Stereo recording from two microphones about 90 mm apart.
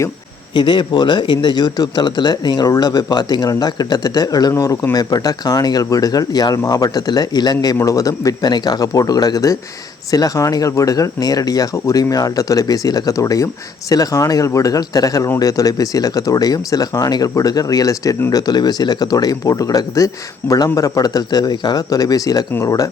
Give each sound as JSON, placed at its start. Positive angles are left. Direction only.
{"t": 0.5, "sound": "speech", "side_deg": 60}
{"t": 7.8, "sound": "speech", "side_deg": 40}
{"t": 20.4, "sound": "speech", "side_deg": 20}
{"t": 20.7, "sound": "speech", "side_deg": 40}